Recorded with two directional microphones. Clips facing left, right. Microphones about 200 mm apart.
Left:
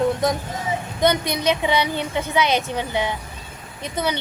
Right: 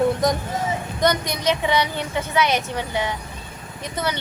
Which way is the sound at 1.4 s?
10° left (ahead or behind).